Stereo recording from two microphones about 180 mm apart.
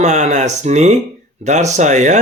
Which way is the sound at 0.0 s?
40° right (ahead or behind).